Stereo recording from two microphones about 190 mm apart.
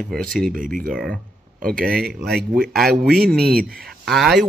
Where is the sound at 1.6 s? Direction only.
50° right (ahead or behind).